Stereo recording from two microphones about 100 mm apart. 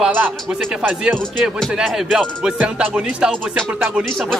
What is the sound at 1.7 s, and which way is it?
Music, centre (ahead or behind).